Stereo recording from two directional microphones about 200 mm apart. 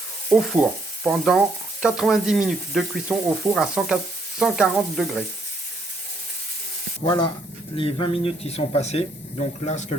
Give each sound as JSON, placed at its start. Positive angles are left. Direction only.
{"t": 0.3, "sound": "sizzle", "side_deg": -5}
{"t": 7.0, "sound": "speech", "side_deg": 25}